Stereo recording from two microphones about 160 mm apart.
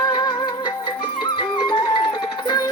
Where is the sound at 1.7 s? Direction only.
30° left (ahead or behind).